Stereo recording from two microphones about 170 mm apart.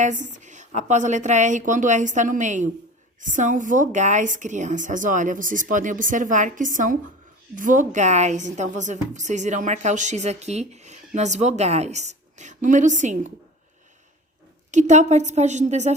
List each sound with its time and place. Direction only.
0.0 s a woman's voice: 45° right (ahead or behind)
14.7 s a woman's voice: 45° right (ahead or behind)